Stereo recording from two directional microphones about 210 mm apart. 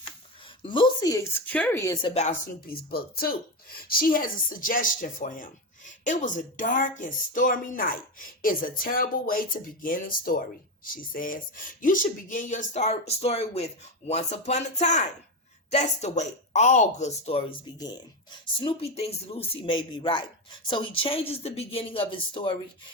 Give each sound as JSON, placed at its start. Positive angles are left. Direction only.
{"t": 0.0, "sound": "a woman's voice", "side_deg": 25}
{"t": 2.2, "sound": "speech", "side_deg": 45}